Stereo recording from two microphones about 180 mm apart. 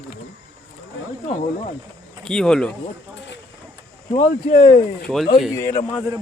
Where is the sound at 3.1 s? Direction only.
75° left (ahead or behind).